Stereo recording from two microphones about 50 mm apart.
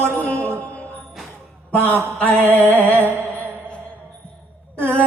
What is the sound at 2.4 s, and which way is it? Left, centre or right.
Music, right.